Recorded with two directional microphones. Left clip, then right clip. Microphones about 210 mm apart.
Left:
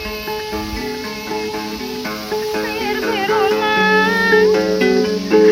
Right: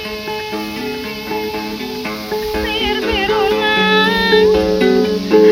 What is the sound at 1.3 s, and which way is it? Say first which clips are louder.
Music: right 2 dB; 15° right (ahead or behind).